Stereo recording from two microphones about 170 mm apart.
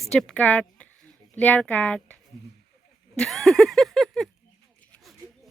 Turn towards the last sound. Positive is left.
turn(degrees=0)  # may be behind; listen again after turning